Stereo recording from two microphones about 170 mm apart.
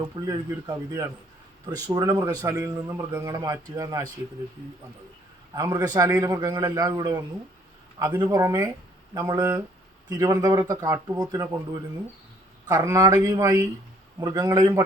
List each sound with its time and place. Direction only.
0.0 s a man's voice: 20° right (ahead or behind)
5.5 s a man's voice: 20° right (ahead or behind)